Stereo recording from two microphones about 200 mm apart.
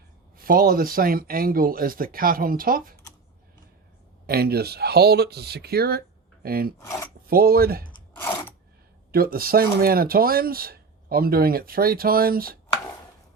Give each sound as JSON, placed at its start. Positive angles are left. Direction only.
{"t": 0.3, "sound": "speech", "side_deg": -45}
{"t": 4.3, "sound": "speech", "side_deg": -50}
{"t": 6.7, "sound": "speech", "side_deg": 15}
{"t": 7.3, "sound": "speech", "side_deg": -50}
{"t": 8.1, "sound": "a sound", "side_deg": 10}
{"t": 9.1, "sound": "speech", "side_deg": -50}